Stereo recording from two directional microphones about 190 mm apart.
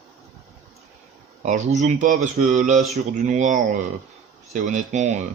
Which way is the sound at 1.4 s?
40° right (ahead or behind).